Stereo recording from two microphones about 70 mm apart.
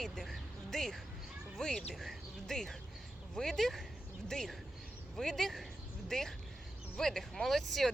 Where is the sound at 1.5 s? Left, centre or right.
Centre.